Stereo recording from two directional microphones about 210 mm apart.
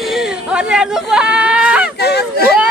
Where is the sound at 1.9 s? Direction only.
50° left (ahead or behind).